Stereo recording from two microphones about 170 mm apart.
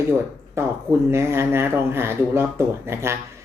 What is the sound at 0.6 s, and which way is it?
Speech, 15° right (ahead or behind).